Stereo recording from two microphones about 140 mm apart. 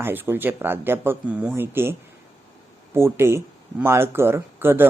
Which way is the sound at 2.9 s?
15° right (ahead or behind).